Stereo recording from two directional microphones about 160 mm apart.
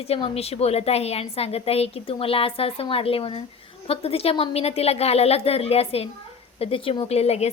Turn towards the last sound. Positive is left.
turn(degrees=40)  # may be behind; listen again after turning